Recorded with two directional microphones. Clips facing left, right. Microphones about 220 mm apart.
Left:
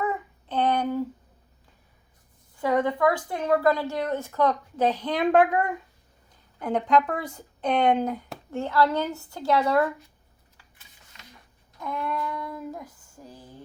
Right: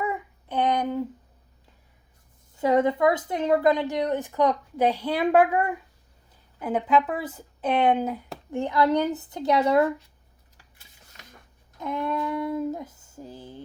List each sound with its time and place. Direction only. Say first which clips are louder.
0.0 s child singing: left 1 dB; 10° right (ahead or behind)
2.6 s a woman's voice: right 2 dB; 25° right (ahead or behind)
11.8 s child singing: right 3 dB; 20° right (ahead or behind)